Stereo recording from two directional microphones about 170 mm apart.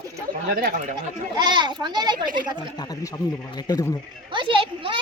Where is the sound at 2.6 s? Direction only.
25° left (ahead or behind).